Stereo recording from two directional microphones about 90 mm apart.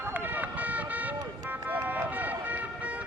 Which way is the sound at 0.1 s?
20° right (ahead or behind).